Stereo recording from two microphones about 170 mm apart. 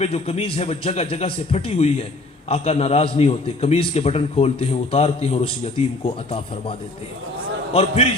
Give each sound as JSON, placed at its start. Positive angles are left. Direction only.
{"t": 0.0, "sound": "a man's voice", "side_deg": 35}